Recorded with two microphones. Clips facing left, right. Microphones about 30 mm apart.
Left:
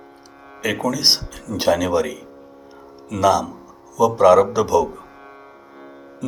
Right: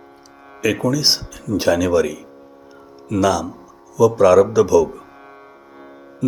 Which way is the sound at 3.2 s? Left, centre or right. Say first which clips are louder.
Left 1 dB; centre.